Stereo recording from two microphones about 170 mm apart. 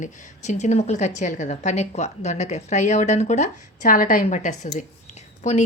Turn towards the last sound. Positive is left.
turn(degrees=45)  # may be behind; listen again after turning